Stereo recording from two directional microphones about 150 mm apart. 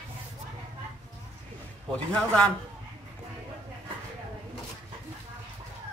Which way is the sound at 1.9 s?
10° left (ahead or behind).